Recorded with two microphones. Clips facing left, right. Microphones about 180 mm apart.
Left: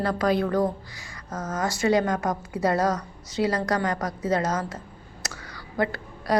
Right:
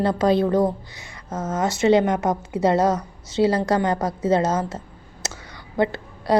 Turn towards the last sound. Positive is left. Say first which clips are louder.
# right 4 dB
turn(degrees=-25)  # may be behind; listen again after turning